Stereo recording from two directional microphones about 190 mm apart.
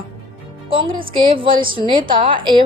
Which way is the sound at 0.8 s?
25° right (ahead or behind).